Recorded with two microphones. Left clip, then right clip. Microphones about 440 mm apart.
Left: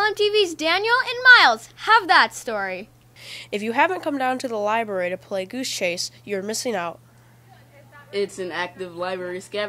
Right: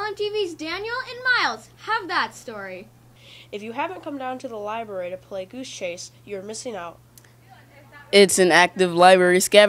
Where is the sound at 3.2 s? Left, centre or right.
Left.